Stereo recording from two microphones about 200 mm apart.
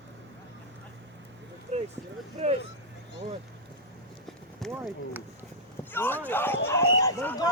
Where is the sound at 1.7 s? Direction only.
35° right (ahead or behind).